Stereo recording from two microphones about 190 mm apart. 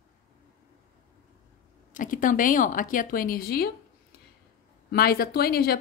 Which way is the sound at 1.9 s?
45° left (ahead or behind).